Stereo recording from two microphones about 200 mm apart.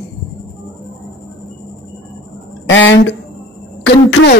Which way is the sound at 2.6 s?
70° left (ahead or behind).